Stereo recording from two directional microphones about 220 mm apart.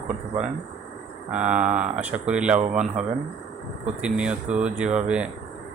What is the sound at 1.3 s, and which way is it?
Speech, 5° right (ahead or behind).